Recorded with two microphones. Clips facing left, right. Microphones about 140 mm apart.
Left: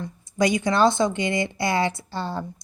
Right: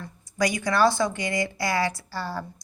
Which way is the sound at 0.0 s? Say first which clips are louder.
Left 4 dB; 25° left (ahead or behind).